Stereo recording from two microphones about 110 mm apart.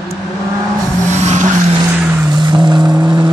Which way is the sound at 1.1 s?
90° right.